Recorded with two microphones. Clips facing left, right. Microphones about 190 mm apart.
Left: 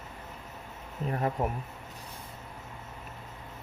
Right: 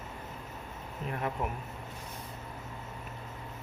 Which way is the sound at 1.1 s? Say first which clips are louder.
Left 4 dB; 35° left (ahead or behind).